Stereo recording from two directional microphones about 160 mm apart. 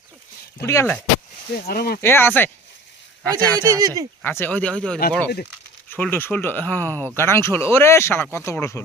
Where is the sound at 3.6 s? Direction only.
20° right (ahead or behind).